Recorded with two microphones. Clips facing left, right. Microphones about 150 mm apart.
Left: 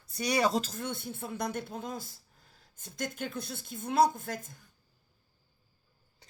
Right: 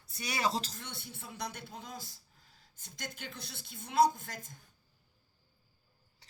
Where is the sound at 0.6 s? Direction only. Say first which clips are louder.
Left 10 dB; 50° left (ahead or behind).